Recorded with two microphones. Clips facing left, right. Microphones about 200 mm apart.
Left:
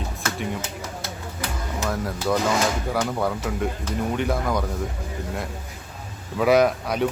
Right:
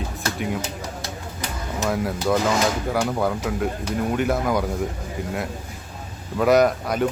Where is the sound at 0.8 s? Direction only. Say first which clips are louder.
Right 1 dB; 15° right (ahead or behind).